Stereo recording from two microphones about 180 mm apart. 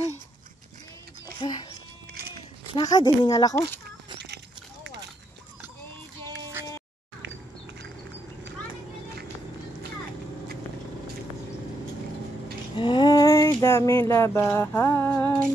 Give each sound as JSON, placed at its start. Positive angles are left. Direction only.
{"t": 1.4, "sound": "speech", "side_deg": 25}
{"t": 2.7, "sound": "speech", "side_deg": 20}
{"t": 6.6, "sound": "music", "side_deg": -15}
{"t": 12.7, "sound": "a sound", "side_deg": 25}